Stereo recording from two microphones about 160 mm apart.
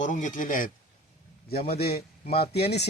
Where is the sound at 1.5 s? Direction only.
75° left (ahead or behind).